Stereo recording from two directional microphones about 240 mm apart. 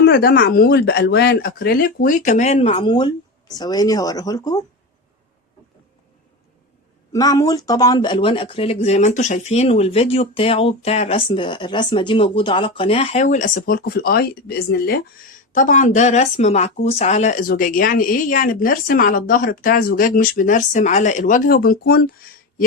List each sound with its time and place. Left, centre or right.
0.0 s speech: left; by 4.6 s centre
7.1 s speech: centre; by 22.1 s left